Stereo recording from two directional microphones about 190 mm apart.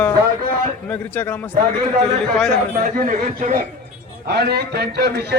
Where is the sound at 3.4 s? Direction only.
45° right (ahead or behind).